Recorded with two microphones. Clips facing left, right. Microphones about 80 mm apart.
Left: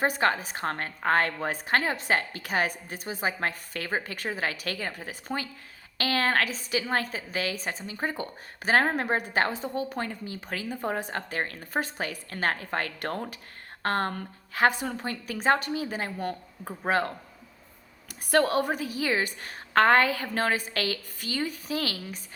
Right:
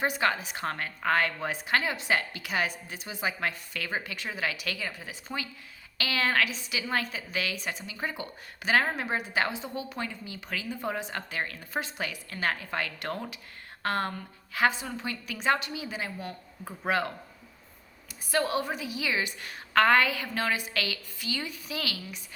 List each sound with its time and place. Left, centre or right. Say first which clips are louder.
0.0 s a woman's voice: left 2 dB; left
16.6 s a woman's voice: left 2 dB; left
18.3 s a woman's voice: left 5 dB; left